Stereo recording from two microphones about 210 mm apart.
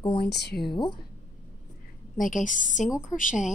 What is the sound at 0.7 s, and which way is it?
Speech, 20° left (ahead or behind).